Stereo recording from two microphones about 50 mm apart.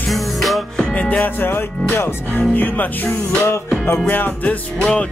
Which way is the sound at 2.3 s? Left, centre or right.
Left.